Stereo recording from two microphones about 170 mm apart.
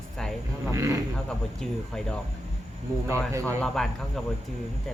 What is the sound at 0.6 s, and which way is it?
Speech, 15° right (ahead or behind).